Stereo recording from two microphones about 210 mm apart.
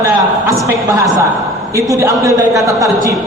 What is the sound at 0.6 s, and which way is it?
A man's voice, 15° right (ahead or behind).